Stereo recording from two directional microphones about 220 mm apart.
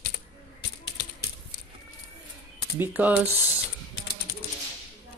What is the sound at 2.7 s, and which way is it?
Speech, 10° right (ahead or behind).